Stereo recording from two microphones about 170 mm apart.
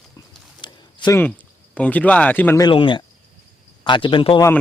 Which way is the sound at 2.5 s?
25° left (ahead or behind).